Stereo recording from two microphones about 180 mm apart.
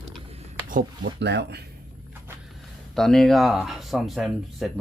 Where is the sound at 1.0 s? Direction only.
70° right (ahead or behind).